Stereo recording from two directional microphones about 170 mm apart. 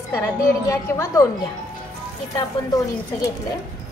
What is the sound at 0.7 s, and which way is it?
Speech, 20° left (ahead or behind).